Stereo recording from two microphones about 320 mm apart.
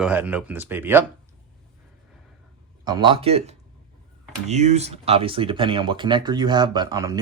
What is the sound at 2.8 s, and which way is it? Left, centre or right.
Speech, centre.